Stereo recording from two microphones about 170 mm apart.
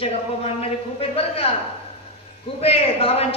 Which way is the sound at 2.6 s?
35° left (ahead or behind).